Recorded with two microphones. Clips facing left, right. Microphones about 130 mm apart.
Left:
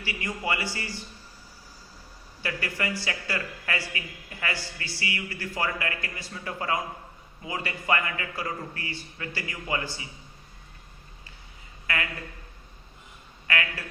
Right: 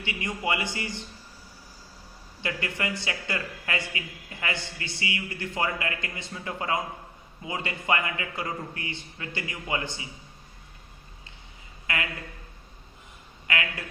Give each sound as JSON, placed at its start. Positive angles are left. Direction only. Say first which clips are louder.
{"t": 0.0, "sound": "speech", "louder": "right 1 dB", "side_deg": -20}
{"t": 2.4, "sound": "speech", "louder": "even", "side_deg": -25}
{"t": 11.9, "sound": "speech", "louder": "even", "side_deg": -20}
{"t": 13.5, "sound": "speech", "louder": "left 1 dB", "side_deg": -20}